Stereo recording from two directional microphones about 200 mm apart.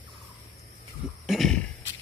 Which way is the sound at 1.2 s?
Centre (ahead or behind).